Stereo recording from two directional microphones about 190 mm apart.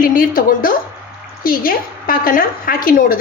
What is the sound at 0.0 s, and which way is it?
A woman's voice, 45° left (ahead or behind).